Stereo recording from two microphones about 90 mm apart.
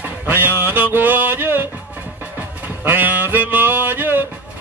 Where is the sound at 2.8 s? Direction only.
20° right (ahead or behind).